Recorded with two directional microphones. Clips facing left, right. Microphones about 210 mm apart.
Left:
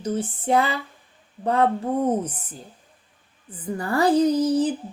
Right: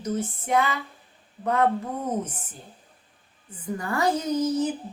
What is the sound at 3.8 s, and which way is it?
Speech, 35° left (ahead or behind).